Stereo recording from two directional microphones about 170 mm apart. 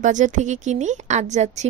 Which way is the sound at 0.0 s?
45° right (ahead or behind).